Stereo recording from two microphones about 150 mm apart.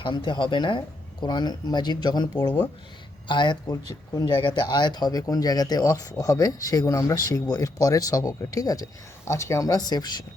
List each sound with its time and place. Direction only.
0.0 s speech: 35° left (ahead or behind)